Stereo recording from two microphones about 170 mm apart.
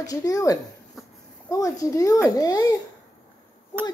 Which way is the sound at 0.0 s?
20° left (ahead or behind).